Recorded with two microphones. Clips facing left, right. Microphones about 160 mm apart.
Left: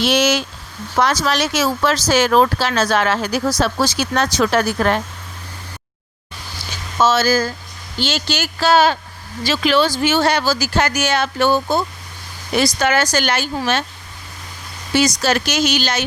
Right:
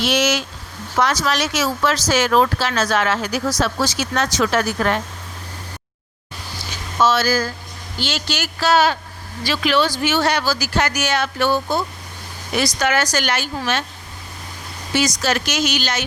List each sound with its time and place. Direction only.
0.0 s speech: 30° left (ahead or behind)
7.0 s speech: 25° left (ahead or behind)
14.9 s speech: 30° left (ahead or behind)